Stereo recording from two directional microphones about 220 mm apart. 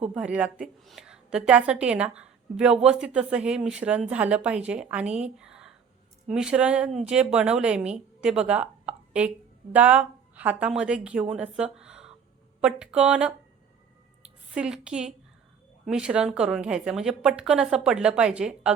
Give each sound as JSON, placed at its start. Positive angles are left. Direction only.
{"t": 0.1, "sound": "a woman's voice", "side_deg": -5}
{"t": 14.5, "sound": "a woman's voice", "side_deg": -5}